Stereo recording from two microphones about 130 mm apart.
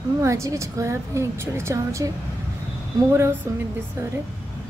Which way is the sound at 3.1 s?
20° right (ahead or behind).